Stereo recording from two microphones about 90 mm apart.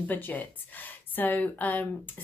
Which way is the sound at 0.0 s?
20° left (ahead or behind).